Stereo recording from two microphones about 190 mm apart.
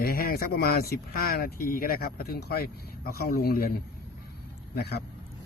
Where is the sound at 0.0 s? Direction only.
50° left (ahead or behind).